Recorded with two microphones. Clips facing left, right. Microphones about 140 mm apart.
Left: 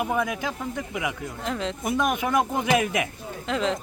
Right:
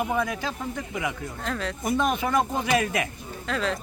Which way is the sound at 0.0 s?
15° left (ahead or behind).